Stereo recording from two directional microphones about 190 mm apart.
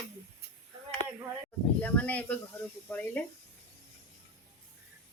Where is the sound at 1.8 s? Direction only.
10° left (ahead or behind).